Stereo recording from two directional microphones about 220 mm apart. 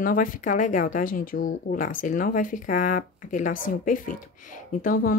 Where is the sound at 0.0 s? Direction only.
35° left (ahead or behind).